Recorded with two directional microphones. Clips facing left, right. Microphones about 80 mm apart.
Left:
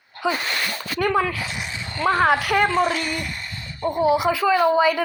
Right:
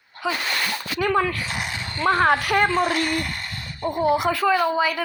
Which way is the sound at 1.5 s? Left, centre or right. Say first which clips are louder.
Right 2 dB; right.